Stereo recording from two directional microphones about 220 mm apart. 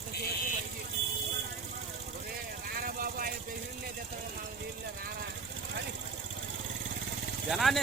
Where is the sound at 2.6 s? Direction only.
40° right (ahead or behind).